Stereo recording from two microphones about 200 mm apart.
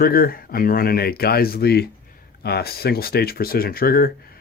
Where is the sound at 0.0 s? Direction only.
50° left (ahead or behind).